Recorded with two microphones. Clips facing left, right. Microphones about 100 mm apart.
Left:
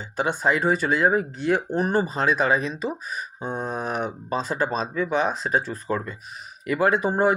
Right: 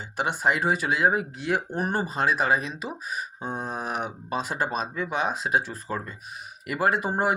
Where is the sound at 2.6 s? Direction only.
40° left (ahead or behind).